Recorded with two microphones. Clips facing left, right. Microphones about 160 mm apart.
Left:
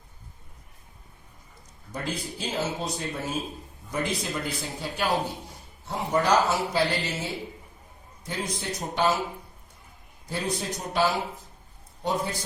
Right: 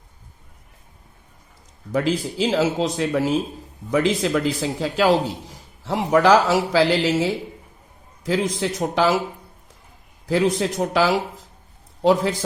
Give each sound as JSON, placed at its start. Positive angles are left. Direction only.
{"t": 1.9, "sound": "a man's voice", "side_deg": -90}
{"t": 10.2, "sound": "a man's voice", "side_deg": -90}